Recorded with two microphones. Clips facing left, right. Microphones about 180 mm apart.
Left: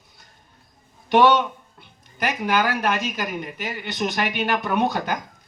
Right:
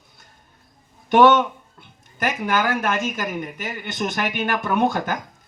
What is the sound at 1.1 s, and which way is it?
Speech, 50° right (ahead or behind).